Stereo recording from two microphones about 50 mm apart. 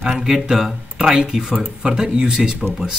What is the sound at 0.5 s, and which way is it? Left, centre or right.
Speech, centre.